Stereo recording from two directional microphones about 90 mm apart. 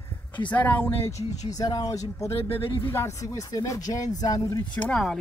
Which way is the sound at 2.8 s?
30° left (ahead or behind).